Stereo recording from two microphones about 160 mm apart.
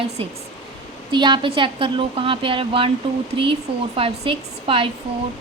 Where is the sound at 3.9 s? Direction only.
35° right (ahead or behind).